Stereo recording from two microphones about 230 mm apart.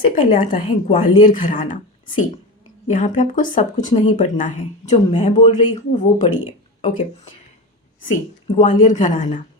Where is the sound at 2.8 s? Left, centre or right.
Left.